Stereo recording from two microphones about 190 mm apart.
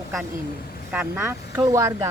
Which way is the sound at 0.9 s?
10° right (ahead or behind).